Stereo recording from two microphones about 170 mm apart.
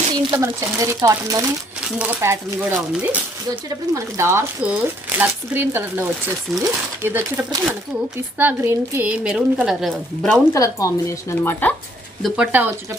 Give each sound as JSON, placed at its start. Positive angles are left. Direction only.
{"t": 0.1, "sound": "speech", "side_deg": -20}
{"t": 10.5, "sound": "speech", "side_deg": 20}
{"t": 12.2, "sound": "speech", "side_deg": -10}